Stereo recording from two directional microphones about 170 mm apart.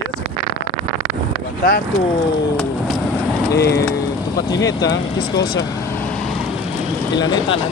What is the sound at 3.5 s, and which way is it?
Speech, 70° left (ahead or behind).